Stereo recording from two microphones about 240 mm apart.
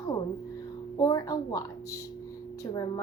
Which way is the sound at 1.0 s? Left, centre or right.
Centre.